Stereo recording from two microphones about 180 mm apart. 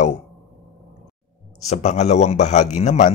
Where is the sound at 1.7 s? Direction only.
40° left (ahead or behind).